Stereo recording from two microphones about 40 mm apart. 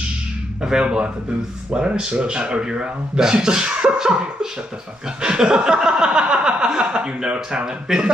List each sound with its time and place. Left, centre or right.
0.6 s speech: centre